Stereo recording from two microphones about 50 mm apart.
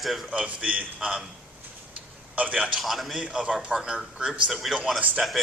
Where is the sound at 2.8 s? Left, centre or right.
Centre.